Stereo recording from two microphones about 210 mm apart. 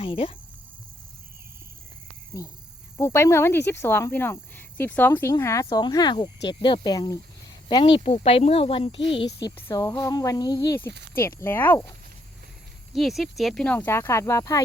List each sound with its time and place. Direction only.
0.0 s speech: 25° left (ahead or behind)
2.3 s speech: 15° left (ahead or behind)
9.6 s speech: 15° left (ahead or behind)
12.9 s speech: centre (ahead or behind)